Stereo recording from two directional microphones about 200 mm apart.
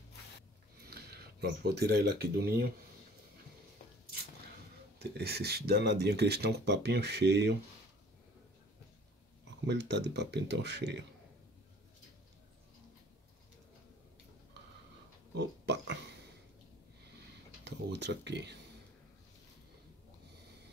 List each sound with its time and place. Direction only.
0.8 s speech: 50° right (ahead or behind)
4.9 s speech: 55° right (ahead or behind)
9.7 s speech: 60° right (ahead or behind)
15.3 s pig: 60° right (ahead or behind)
17.6 s speech: 60° right (ahead or behind)